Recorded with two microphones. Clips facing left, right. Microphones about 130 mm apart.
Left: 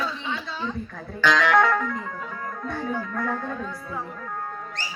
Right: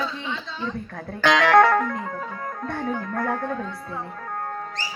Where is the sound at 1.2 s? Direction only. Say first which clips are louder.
Right 3 dB; 60° right (ahead or behind).